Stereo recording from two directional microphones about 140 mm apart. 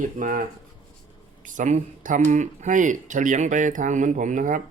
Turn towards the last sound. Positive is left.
turn(degrees=-65)  # may be behind; listen again after turning